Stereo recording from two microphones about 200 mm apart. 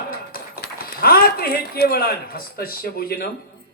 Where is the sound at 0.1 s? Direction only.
50° left (ahead or behind).